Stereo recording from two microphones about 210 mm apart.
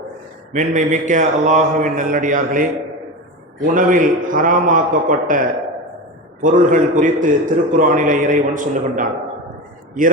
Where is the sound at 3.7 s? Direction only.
40° right (ahead or behind).